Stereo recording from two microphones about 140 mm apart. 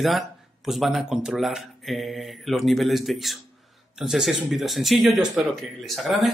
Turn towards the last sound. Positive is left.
turn(degrees=0)  # may be behind; listen again after turning